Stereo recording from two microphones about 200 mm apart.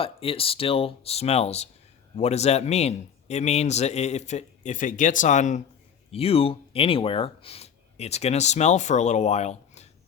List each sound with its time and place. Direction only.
0.0 s speech: 30° left (ahead or behind)